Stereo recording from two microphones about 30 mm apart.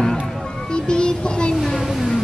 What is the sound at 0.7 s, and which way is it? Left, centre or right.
Child singing, left.